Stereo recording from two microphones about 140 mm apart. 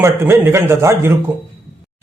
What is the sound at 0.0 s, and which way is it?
A man's voice, 20° right (ahead or behind).